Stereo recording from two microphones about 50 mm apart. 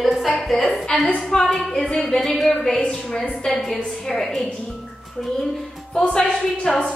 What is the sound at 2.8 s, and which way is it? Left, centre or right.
Speech, left.